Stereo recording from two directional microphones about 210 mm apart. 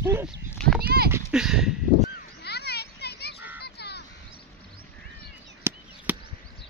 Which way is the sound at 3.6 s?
50° left (ahead or behind).